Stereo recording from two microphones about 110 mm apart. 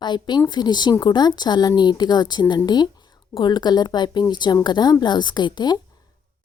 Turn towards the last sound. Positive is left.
turn(degrees=40)  # may be behind; listen again after turning